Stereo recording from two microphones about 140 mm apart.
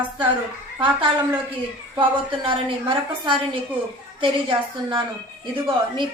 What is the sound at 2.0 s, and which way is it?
A woman's voice, 35° right (ahead or behind).